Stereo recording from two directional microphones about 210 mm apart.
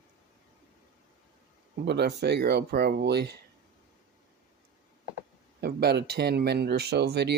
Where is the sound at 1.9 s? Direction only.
55° right (ahead or behind).